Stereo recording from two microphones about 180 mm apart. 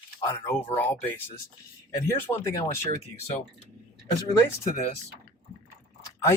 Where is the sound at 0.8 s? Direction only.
10° left (ahead or behind).